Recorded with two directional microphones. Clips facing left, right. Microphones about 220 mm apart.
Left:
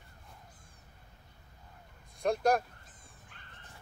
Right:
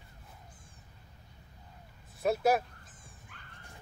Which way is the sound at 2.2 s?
5° right (ahead or behind).